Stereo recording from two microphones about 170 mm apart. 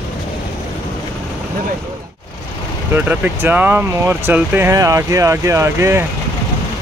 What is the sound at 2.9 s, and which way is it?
Speech, 10° right (ahead or behind).